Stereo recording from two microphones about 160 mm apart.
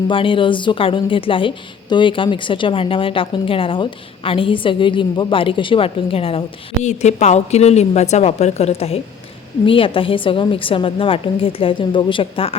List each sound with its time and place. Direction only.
0.1 s a woman's voice: 30° left (ahead or behind)